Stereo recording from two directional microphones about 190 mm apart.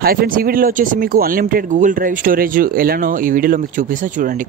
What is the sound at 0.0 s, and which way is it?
Speech, 50° right (ahead or behind).